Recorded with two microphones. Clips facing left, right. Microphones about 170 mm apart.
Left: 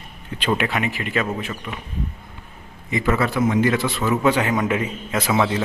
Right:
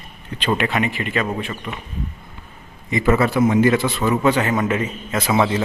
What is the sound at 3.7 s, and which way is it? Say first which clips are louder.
A man's voice: right 2 dB; centre (ahead or behind).